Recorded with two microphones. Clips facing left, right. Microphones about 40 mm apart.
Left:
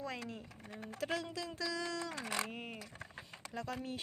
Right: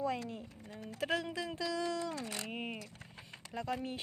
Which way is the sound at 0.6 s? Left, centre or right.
Left.